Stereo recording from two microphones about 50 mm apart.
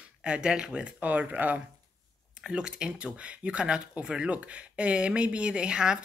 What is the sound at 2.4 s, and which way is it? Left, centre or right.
Speech, centre.